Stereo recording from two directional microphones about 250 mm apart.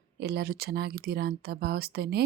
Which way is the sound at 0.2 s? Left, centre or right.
Right.